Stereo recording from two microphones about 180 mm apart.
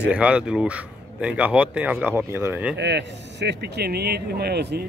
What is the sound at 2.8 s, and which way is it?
Speech, 70° right (ahead or behind).